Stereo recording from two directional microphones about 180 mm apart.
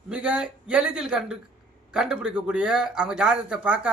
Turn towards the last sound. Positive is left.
turn(degrees=-5)  # may be behind; listen again after turning